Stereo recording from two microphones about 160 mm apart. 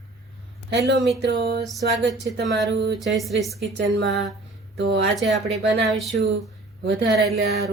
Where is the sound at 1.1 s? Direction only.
90° right.